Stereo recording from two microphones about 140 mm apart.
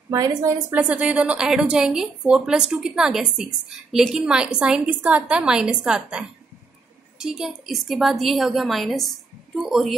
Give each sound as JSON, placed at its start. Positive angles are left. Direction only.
{"t": 0.4, "sound": "a woman's voice", "side_deg": -25}
{"t": 0.7, "sound": "a woman's voice", "side_deg": -10}